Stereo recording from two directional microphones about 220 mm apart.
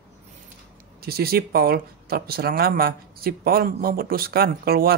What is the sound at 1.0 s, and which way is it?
Speech, 45° right (ahead or behind).